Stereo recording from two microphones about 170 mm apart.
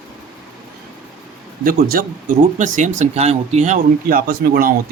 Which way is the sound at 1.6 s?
55° right (ahead or behind).